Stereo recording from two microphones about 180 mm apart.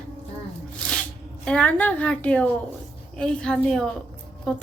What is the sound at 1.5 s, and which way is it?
A woman's voice, 5° left (ahead or behind).